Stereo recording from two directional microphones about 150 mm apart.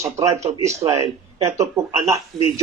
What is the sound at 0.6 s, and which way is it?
Speech, 40° right (ahead or behind).